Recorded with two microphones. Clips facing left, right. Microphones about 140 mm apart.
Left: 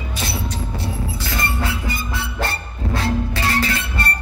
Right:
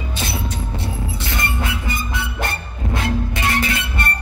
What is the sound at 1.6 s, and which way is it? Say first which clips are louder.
Music: even; 20° right (ahead or behind).